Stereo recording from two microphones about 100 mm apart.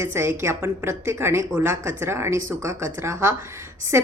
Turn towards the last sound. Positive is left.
turn(degrees=-25)  # may be behind; listen again after turning